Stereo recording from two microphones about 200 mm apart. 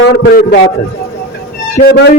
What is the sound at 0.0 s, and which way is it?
Speech, 50° left (ahead or behind).